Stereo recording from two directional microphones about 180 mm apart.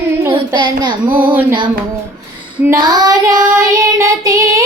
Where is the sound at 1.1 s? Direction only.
10° right (ahead or behind).